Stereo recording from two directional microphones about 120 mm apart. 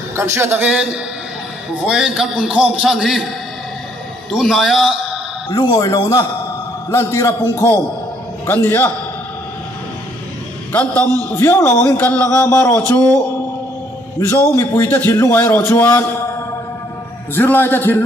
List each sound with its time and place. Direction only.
0.1 s a man's voice: 20° right (ahead or behind)
1.9 s a man's voice: 5° right (ahead or behind)
4.3 s a man's voice: centre (ahead or behind)
5.5 s a man's voice: 35° left (ahead or behind)
8.5 s a man's voice: 15° left (ahead or behind)
10.7 s a man's voice: 10° left (ahead or behind)
14.2 s a man's voice: 20° left (ahead or behind)
17.3 s a man's voice: 15° left (ahead or behind)